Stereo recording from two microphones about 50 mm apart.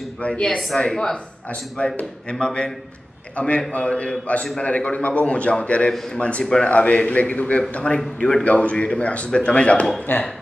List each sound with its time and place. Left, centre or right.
0.2 s a man's voice: left
10.1 s speech: left